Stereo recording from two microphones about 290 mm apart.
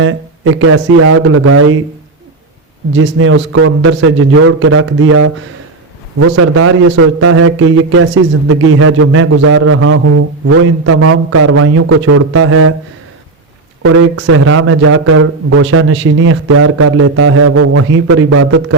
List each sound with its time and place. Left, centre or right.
0.0 s a man's voice: right
2.9 s a man's voice: right
13.8 s a man's voice: right